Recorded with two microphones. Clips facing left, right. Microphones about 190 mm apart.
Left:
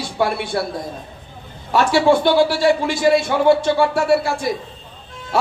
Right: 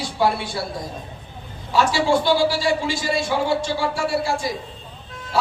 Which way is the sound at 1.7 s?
60° left (ahead or behind).